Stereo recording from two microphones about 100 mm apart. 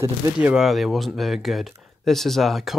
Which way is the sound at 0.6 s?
Centre (ahead or behind).